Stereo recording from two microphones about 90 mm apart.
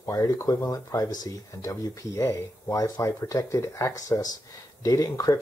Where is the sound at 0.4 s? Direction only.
40° left (ahead or behind).